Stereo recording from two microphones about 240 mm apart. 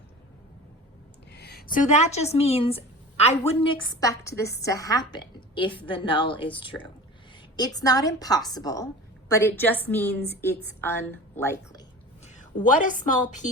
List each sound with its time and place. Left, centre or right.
1.3 s a woman's voice: left; by 11.8 s centre
12.2 s a woman's voice: left